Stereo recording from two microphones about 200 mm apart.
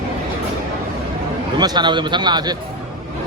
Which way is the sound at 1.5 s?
20° right (ahead or behind).